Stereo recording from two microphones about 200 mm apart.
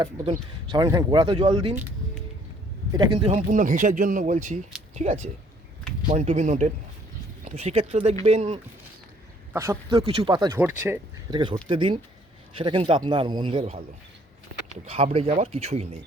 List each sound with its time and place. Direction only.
0.7 s speech: 15° right (ahead or behind)
2.9 s speech: 20° right (ahead or behind)
3.3 s speech: 40° right (ahead or behind)
9.5 s speech: 15° right (ahead or behind)
10.1 s speech: 25° right (ahead or behind)
10.6 s speech: 10° right (ahead or behind)
11.3 s speech: 20° right (ahead or behind)
14.8 s speech: 30° right (ahead or behind)